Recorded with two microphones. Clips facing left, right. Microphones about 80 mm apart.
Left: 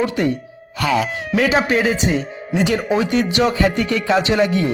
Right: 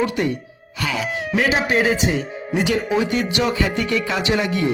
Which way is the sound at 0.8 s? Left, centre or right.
Left.